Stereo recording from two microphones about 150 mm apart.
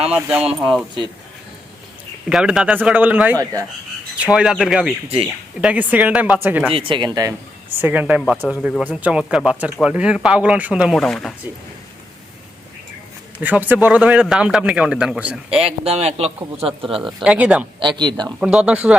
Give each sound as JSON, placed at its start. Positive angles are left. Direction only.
{"t": 0.1, "sound": "speech", "side_deg": -10}
{"t": 2.3, "sound": "speech", "side_deg": -5}
{"t": 6.7, "sound": "a man's voice", "side_deg": -35}
{"t": 7.8, "sound": "speech", "side_deg": -10}
{"t": 13.4, "sound": "speech", "side_deg": -10}
{"t": 15.6, "sound": "a man's voice", "side_deg": -40}
{"t": 17.2, "sound": "speech", "side_deg": -10}
{"t": 17.7, "sound": "speech", "side_deg": -30}
{"t": 18.3, "sound": "speech", "side_deg": -5}